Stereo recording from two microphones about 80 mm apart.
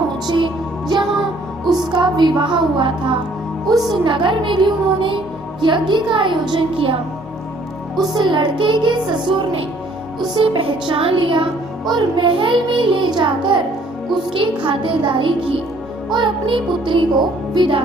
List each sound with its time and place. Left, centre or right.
0.3 s music: right
3.9 s speech: right
8.1 s music: right
10.3 s speech: right